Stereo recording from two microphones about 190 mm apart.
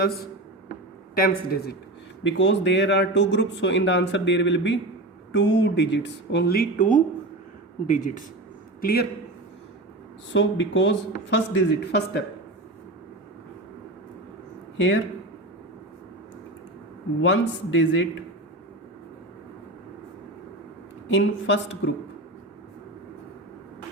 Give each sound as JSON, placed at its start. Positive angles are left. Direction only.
{"t": 1.1, "sound": "a man's voice", "side_deg": 50}
{"t": 2.2, "sound": "a man's voice", "side_deg": 70}
{"t": 8.8, "sound": "a man's voice", "side_deg": 55}
{"t": 10.3, "sound": "speech", "side_deg": 75}
{"t": 14.8, "sound": "speech", "side_deg": 75}
{"t": 17.2, "sound": "speech", "side_deg": 75}
{"t": 21.1, "sound": "speech", "side_deg": 75}